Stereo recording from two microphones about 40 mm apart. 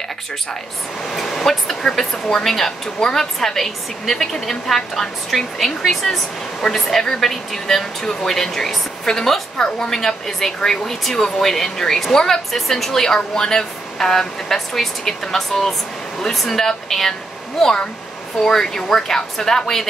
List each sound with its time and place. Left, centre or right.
1.1 s speech: centre
3.0 s a woman's voice: centre
3.3 s speech: centre